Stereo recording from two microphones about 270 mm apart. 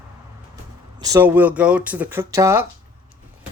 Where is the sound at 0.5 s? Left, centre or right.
Centre.